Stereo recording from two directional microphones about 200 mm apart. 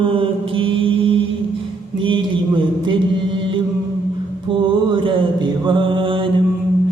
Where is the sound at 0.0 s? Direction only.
25° right (ahead or behind).